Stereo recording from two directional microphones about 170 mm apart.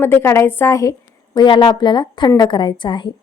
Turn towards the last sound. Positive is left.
turn(degrees=30)  # may be behind; listen again after turning